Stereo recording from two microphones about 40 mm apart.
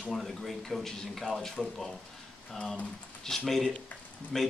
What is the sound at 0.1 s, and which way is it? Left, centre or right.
Speech, centre.